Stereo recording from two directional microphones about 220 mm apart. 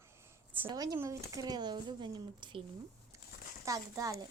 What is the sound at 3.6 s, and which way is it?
Speech, 15° right (ahead or behind).